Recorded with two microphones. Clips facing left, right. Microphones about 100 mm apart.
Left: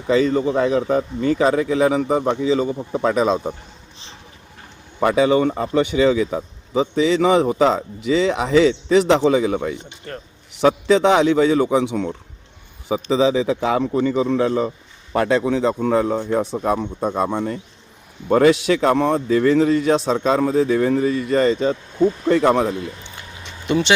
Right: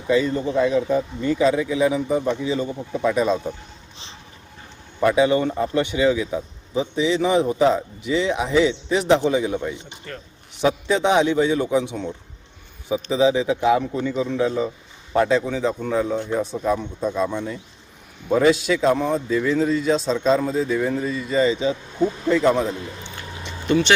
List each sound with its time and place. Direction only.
0.1 s speech: 80° left
4.9 s a man's voice: 80° left
10.1 s speech: 40° left (ahead or behind)
10.6 s a man's voice: 90° left; by 22.7 s 65° left (ahead or behind)
23.6 s speech: 25° left (ahead or behind)